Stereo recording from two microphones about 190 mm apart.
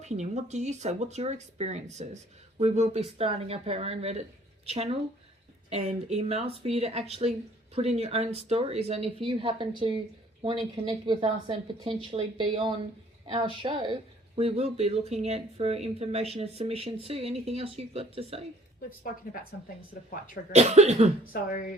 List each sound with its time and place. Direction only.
0.0 s a woman's voice: 35° right (ahead or behind)
20.1 s speech: 45° left (ahead or behind)
20.5 s speech: 35° right (ahead or behind)